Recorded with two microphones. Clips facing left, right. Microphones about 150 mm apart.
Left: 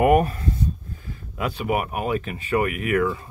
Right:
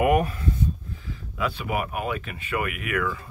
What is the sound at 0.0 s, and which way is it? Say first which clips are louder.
Speech: left 4 dB; 40° left (ahead or behind).